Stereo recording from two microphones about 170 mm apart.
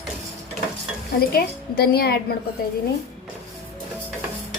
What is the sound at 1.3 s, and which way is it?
A woman's voice, 65° left (ahead or behind).